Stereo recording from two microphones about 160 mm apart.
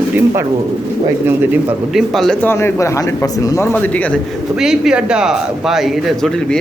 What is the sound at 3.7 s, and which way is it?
Speech, 10° left (ahead or behind).